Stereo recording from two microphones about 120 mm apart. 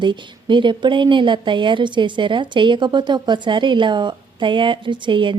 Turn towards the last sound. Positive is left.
turn(degrees=-45)  # may be behind; listen again after turning